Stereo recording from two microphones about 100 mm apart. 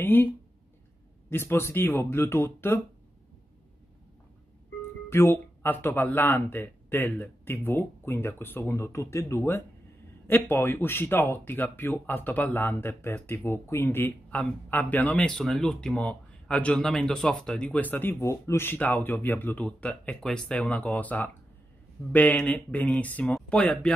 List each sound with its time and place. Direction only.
0.0 s speech: 20° left (ahead or behind)
1.3 s speech: 25° left (ahead or behind)
5.1 s speech: 25° left (ahead or behind); by 23.9 s 10° left (ahead or behind)